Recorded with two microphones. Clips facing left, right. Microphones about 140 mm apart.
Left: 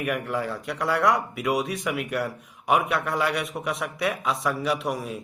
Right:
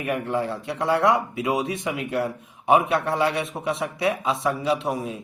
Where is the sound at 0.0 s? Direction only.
30° right (ahead or behind).